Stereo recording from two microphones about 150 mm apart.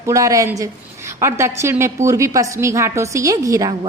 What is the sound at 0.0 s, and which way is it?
A woman's voice, 20° right (ahead or behind).